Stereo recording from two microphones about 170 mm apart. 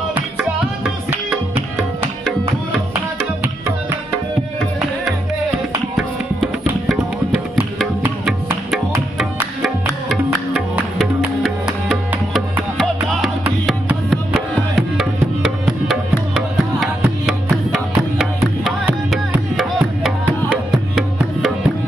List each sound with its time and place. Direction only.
0.1 s music: 5° right (ahead or behind)
8.3 s music: centre (ahead or behind)
12.1 s music: 10° right (ahead or behind)